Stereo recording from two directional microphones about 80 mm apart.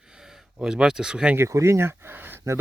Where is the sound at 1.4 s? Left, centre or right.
Right.